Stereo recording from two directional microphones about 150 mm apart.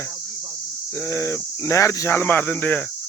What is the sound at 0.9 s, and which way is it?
Speech, 20° left (ahead or behind).